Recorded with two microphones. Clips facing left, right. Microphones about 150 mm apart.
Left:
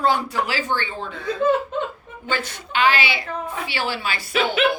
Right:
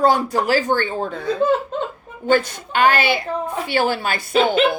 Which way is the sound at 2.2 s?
50° right (ahead or behind).